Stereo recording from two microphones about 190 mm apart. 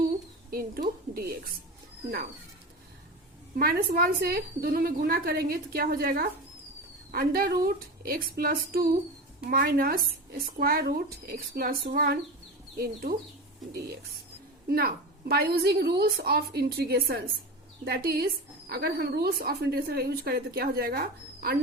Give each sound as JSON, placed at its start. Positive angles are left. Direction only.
{"t": 0.5, "sound": "a woman's voice", "side_deg": -50}
{"t": 3.5, "sound": "a woman's voice", "side_deg": -50}
{"t": 14.7, "sound": "a woman's voice", "side_deg": -55}